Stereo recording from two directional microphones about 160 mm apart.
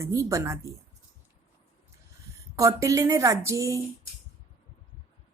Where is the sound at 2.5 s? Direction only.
20° right (ahead or behind).